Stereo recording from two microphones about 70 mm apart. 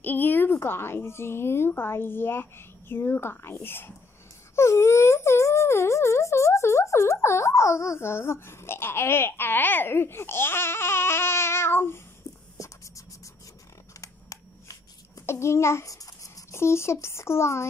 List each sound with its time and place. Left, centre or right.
0.0 s speech: left
12.5 s writing: left
14.0 s shuffling cards: left
15.2 s a child's voice: left
16.5 s speech: left